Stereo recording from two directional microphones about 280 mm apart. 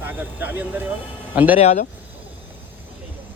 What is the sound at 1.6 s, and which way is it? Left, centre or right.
Speech, left.